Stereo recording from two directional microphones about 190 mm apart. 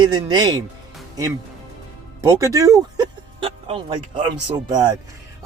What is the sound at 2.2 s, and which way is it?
Speech, 15° right (ahead or behind).